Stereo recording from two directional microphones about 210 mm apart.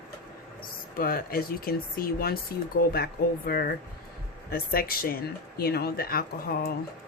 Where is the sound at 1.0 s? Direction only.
45° left (ahead or behind).